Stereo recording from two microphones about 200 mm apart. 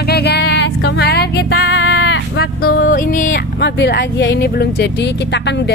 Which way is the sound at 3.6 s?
60° left (ahead or behind).